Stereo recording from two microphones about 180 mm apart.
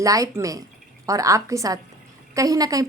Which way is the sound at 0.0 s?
20° right (ahead or behind).